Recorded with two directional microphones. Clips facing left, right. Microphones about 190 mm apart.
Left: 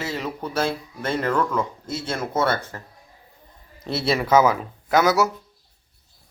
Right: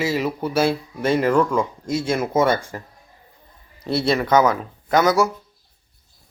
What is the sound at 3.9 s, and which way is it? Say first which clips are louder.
A man's voice: right 2 dB; centre (ahead or behind).